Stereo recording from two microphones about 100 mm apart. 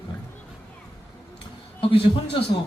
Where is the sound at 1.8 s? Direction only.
60° left (ahead or behind).